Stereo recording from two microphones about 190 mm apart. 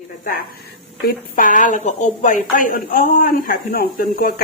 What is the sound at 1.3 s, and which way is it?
A woman's voice, 45° left (ahead or behind).